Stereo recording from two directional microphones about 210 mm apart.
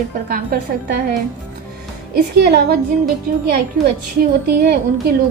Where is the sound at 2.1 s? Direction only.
50° right (ahead or behind).